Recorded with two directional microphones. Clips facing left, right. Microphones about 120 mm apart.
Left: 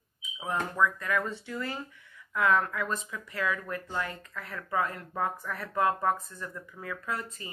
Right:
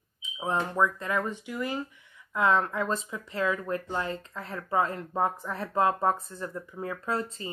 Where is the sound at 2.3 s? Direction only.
25° right (ahead or behind).